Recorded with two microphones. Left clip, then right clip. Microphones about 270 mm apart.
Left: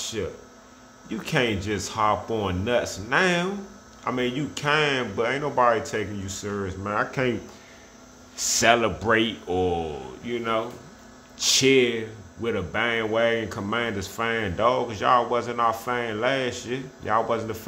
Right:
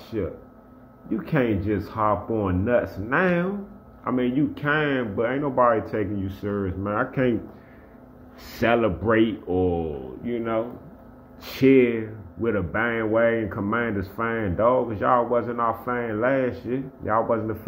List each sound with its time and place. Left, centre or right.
0.2 s speech: centre
8.5 s speech: centre